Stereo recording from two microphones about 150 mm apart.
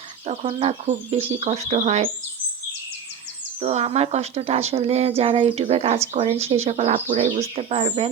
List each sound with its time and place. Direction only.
0.3 s speech: 45° right (ahead or behind)
3.6 s speech: 45° right (ahead or behind)